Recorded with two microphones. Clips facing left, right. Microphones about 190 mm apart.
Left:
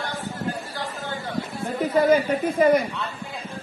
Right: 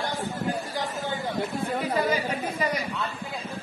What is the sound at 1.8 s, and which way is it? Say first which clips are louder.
Speech: left 9 dB; 50° left (ahead or behind).